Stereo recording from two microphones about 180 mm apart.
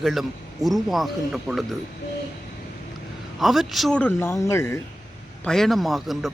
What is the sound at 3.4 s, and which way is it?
Speech, centre (ahead or behind).